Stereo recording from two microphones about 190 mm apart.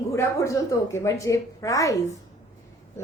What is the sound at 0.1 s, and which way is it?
A woman's voice, 15° left (ahead or behind).